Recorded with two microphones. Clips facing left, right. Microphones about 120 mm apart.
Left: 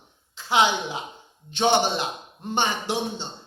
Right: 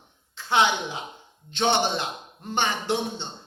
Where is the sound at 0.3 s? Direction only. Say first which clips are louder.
Left 1 dB; 15° left (ahead or behind).